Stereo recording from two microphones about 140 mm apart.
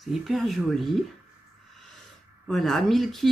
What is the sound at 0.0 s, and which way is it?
Speech, centre (ahead or behind).